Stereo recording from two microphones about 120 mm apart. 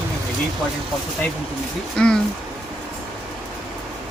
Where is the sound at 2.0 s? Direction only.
5° left (ahead or behind).